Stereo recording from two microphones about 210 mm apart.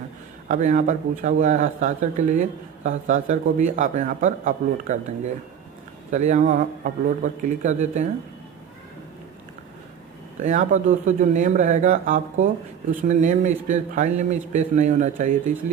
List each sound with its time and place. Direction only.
0.4 s speech: 35° right (ahead or behind)
10.4 s speech: 40° right (ahead or behind)